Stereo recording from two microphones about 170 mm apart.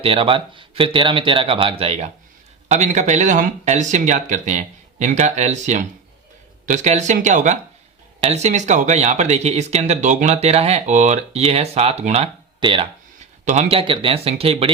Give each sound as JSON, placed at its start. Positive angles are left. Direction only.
{"t": 0.0, "sound": "speech", "side_deg": -35}
{"t": 13.4, "sound": "speech", "side_deg": -45}